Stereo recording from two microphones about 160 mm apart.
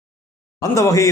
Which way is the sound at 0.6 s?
20° left (ahead or behind).